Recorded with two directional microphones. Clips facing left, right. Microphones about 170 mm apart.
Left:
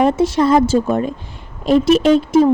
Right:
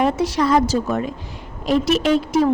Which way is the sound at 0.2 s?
25° left (ahead or behind).